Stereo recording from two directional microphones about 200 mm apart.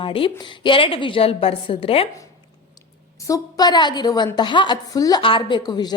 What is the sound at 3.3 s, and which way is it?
A woman's voice, 20° left (ahead or behind).